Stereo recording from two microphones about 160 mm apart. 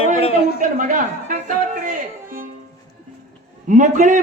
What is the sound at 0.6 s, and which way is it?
Speech, 55° right (ahead or behind).